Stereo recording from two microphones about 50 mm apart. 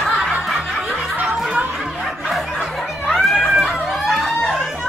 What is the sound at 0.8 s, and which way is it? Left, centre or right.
Music, right.